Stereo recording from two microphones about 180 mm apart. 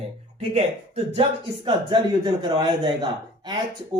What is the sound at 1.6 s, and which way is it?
Speech, 25° right (ahead or behind).